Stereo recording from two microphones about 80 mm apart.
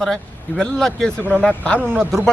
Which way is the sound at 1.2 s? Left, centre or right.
Centre.